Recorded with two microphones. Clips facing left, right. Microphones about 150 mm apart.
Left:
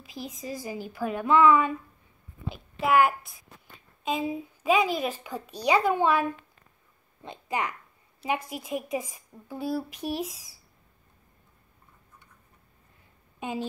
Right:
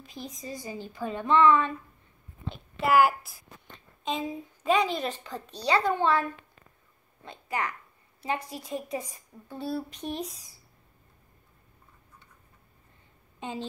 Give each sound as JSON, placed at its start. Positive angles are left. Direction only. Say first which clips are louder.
{"t": 0.0, "sound": "a woman's voice", "louder": "left 2 dB", "side_deg": 5}
{"t": 13.4, "sound": "speech", "louder": "left 3 dB", "side_deg": 10}